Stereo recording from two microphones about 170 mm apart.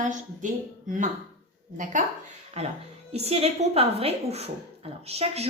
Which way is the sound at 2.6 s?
40° right (ahead or behind).